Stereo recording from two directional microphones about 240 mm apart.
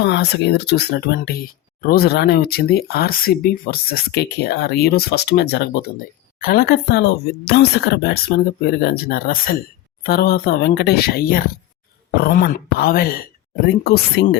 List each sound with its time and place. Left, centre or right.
0.0 s speech: left